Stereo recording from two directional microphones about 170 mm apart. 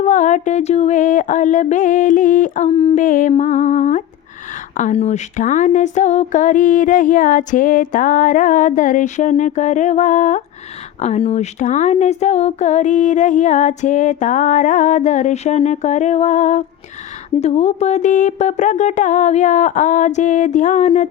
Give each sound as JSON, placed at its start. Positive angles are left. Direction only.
{"t": 0.0, "sound": "speech", "side_deg": 45}
{"t": 2.6, "sound": "speech", "side_deg": 35}
{"t": 3.0, "sound": "speech", "side_deg": 50}